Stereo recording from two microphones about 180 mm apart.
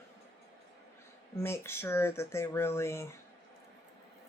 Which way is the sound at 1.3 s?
15° left (ahead or behind).